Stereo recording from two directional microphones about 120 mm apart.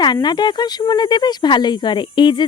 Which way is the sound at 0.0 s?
35° left (ahead or behind).